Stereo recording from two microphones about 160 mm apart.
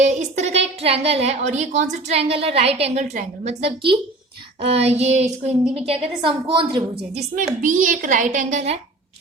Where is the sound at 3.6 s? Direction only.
30° right (ahead or behind).